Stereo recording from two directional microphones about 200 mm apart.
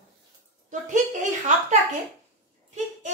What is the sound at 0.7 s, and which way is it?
Speech, 40° right (ahead or behind).